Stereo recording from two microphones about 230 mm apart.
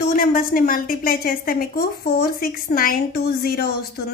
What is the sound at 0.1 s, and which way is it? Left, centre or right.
A woman's voice, left.